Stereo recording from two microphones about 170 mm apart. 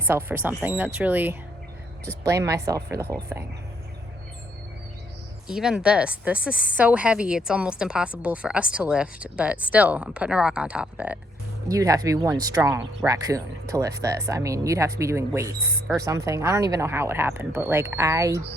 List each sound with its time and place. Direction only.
0.1 s a woman's voice: 10° right (ahead or behind)
5.5 s a woman's voice: 5° right (ahead or behind)
11.7 s a woman's voice: 20° right (ahead or behind)